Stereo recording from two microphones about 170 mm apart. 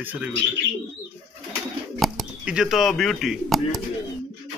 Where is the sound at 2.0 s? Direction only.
Centre (ahead or behind).